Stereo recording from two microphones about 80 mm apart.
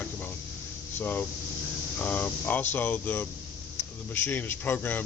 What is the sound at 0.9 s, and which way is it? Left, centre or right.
Speech, left.